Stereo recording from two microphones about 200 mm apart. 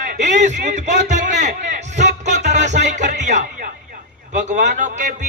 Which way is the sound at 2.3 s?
60° right (ahead or behind).